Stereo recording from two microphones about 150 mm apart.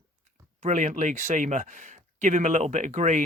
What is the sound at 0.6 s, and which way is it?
Speech, 55° right (ahead or behind).